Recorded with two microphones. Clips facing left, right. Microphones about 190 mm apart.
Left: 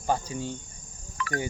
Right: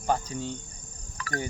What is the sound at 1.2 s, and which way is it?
Insect, 40° right (ahead or behind).